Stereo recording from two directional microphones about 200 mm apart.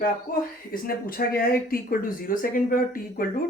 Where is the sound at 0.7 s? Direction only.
45° left (ahead or behind).